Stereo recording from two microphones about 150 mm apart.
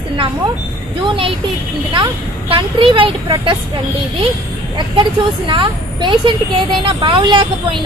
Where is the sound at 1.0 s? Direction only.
35° right (ahead or behind).